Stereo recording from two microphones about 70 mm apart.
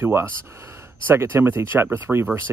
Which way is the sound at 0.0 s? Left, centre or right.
Right.